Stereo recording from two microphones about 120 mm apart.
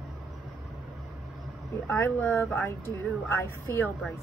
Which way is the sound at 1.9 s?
15° left (ahead or behind).